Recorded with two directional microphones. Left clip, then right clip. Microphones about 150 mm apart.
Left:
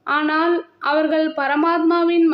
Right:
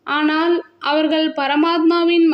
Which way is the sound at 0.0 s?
20° right (ahead or behind).